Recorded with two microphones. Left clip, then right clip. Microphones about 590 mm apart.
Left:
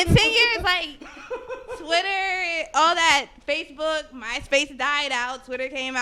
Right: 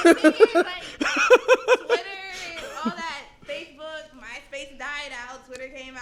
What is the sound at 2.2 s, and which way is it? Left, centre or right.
Speech, left.